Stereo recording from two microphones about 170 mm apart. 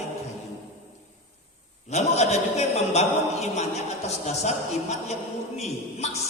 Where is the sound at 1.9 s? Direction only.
40° left (ahead or behind).